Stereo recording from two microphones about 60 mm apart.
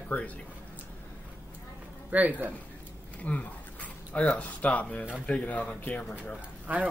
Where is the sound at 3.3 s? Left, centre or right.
Left.